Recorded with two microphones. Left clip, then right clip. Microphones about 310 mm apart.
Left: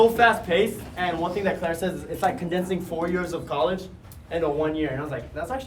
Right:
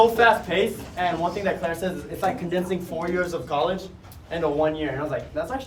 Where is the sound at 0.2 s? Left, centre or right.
Centre.